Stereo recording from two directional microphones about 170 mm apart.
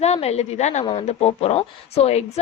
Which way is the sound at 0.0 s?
40° left (ahead or behind).